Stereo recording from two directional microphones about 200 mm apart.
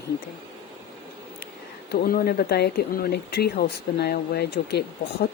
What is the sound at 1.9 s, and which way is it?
Speech, 50° left (ahead or behind).